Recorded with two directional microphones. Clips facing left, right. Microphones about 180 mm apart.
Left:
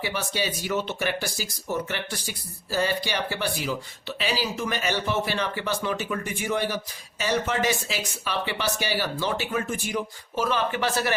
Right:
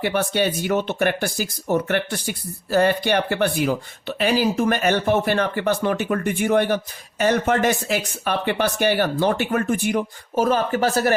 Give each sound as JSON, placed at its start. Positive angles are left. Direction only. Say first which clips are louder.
{"t": 0.0, "sound": "speech", "louder": "right 8 dB", "side_deg": -55}